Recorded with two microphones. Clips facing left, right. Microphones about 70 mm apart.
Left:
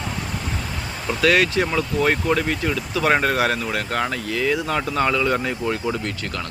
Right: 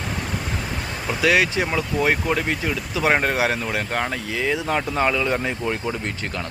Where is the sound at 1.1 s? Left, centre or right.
Centre.